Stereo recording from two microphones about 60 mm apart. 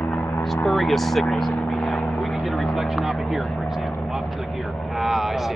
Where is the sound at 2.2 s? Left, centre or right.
Centre.